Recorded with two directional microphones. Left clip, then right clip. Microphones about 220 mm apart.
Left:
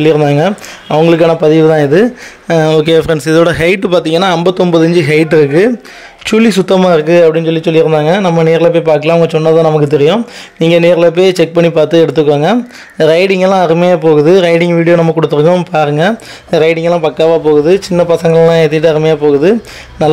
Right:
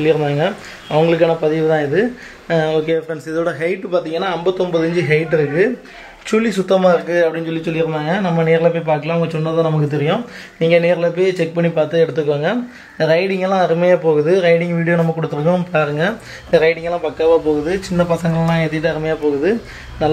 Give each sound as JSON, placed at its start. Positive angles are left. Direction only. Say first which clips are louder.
{"t": 0.0, "sound": "a man's voice", "louder": "left 7 dB", "side_deg": 50}
{"t": 6.2, "sound": "a man's voice", "louder": "left 8 dB", "side_deg": 40}